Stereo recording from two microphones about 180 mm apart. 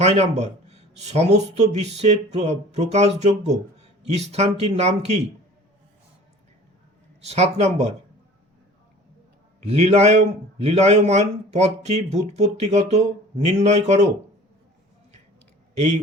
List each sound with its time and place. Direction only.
0.0 s speech: 40° right (ahead or behind)
7.2 s speech: 35° right (ahead or behind)
9.6 s speech: 35° right (ahead or behind)